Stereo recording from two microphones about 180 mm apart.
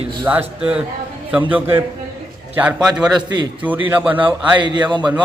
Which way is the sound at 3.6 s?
10° right (ahead or behind).